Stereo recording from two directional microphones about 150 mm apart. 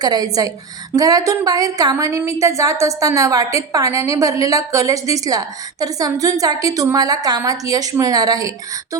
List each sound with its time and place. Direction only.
0.0 s a woman's voice: 25° right (ahead or behind)